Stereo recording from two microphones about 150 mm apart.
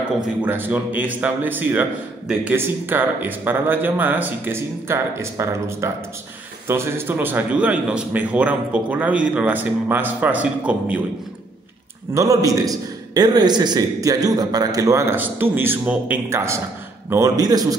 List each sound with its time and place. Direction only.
0.4 s a man's voice: 10° right (ahead or behind)
12.1 s a man's voice: 20° right (ahead or behind)